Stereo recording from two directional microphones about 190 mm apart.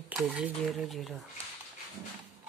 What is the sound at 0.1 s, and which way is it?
Speech, 5° right (ahead or behind).